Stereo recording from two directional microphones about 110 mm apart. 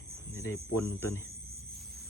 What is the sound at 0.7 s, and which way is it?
Speech, 25° left (ahead or behind).